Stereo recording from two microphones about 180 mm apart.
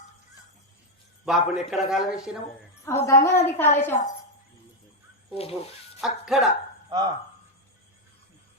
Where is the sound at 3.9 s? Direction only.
40° left (ahead or behind).